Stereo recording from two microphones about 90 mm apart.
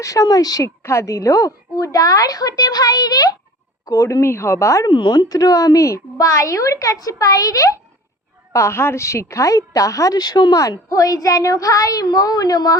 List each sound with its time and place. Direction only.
0.0 s a woman's voice: 40° left (ahead or behind)
4.9 s a woman's voice: 55° left (ahead or behind); by 7.8 s 40° left (ahead or behind)
8.5 s a woman's voice: 30° left (ahead or behind); by 12.7 s 50° left (ahead or behind)